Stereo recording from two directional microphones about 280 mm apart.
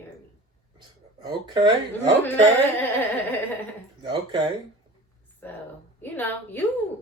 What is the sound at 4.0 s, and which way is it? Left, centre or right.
Speech, centre.